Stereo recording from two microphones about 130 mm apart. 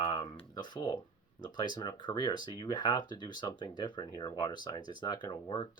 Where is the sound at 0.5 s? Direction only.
35° left (ahead or behind).